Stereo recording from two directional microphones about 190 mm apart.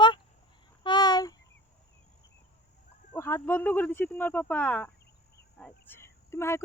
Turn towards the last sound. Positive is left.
turn(degrees=15)  # may be behind; listen again after turning